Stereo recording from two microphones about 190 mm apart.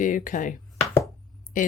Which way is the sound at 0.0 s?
45° left (ahead or behind).